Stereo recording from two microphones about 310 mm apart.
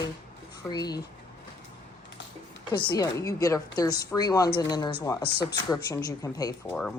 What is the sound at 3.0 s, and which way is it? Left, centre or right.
Speech, centre.